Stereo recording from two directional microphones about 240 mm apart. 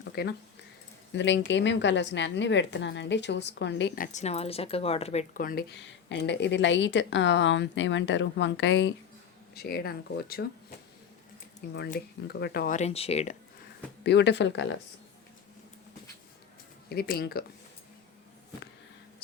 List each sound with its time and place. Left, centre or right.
0.2 s a woman's voice: left
11.9 s speech: left
14.0 s a woman's voice: left
16.9 s speech: left